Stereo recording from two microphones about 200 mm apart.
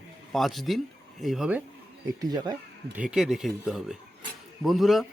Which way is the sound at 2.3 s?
20° right (ahead or behind).